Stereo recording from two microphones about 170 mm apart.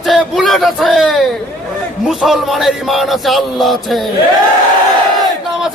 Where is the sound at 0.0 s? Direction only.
Centre (ahead or behind).